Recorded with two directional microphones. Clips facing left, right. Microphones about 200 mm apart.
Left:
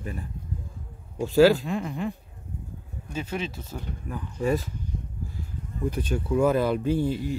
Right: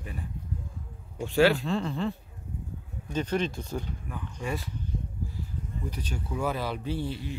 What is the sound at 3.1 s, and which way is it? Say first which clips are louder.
Speech: right 3 dB; 5° left (ahead or behind).